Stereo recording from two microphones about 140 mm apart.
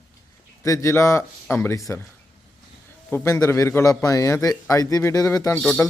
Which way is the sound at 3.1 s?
20° left (ahead or behind).